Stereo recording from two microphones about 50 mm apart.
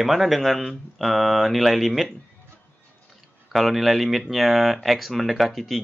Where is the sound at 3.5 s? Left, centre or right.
Centre.